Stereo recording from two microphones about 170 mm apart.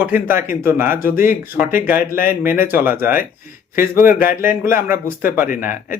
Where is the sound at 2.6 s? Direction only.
60° left (ahead or behind).